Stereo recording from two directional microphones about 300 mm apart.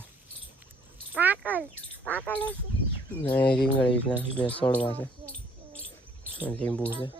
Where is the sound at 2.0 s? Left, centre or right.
Centre.